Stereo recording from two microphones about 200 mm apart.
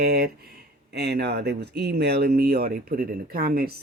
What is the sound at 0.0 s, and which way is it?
Speech, 50° right (ahead or behind).